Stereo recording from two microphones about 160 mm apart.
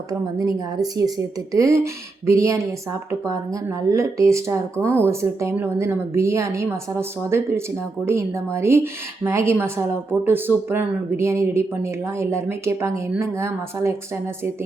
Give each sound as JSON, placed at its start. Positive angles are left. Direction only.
{"t": 0.1, "sound": "speech", "side_deg": -20}